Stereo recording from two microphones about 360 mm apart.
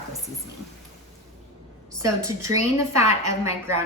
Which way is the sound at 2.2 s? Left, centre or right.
Right.